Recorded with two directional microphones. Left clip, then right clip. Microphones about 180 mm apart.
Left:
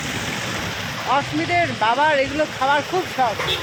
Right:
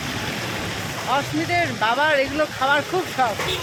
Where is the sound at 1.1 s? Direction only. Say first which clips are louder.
Left 2 dB; 25° left (ahead or behind).